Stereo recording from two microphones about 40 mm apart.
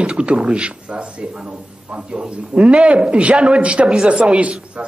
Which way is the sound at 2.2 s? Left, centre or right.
Right.